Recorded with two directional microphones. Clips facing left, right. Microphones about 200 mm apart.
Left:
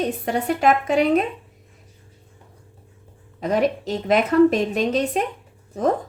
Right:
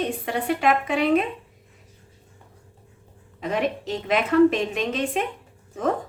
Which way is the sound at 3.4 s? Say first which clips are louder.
Left 4 dB; 40° left (ahead or behind).